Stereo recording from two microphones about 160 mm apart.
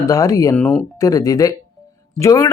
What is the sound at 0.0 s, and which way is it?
Speech, 20° left (ahead or behind).